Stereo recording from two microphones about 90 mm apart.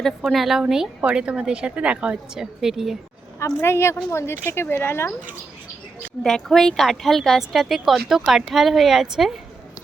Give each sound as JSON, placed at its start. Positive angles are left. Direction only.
{"t": 0.0, "sound": "a woman's voice", "side_deg": 0}
{"t": 3.4, "sound": "a woman's voice", "side_deg": 30}
{"t": 6.2, "sound": "a woman's voice", "side_deg": 5}